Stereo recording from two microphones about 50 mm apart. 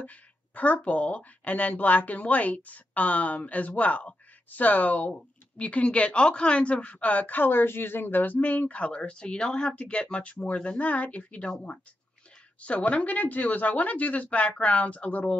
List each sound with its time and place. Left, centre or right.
0.0 s speech: left
12.5 s speech: left